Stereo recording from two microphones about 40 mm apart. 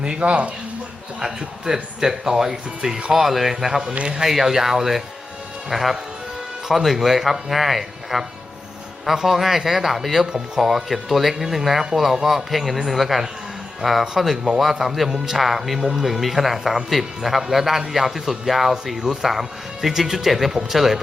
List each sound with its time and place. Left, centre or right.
0.0 s speech: right
1.2 s a man's voice: centre
3.2 s a man's voice: centre
3.9 s speech: right
4.2 s a man's voice: centre